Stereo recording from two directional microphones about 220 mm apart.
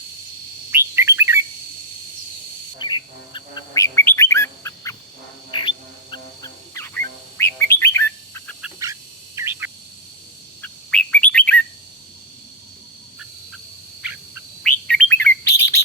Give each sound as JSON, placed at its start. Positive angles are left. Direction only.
{"t": 0.7, "sound": "bird", "side_deg": -10}
{"t": 2.7, "sound": "bird", "side_deg": 20}
{"t": 5.5, "sound": "music", "side_deg": 20}
{"t": 6.7, "sound": "bird", "side_deg": 10}
{"t": 8.8, "sound": "bird", "side_deg": -15}
{"t": 10.6, "sound": "bird", "side_deg": 5}
{"t": 14.6, "sound": "chirp", "side_deg": 5}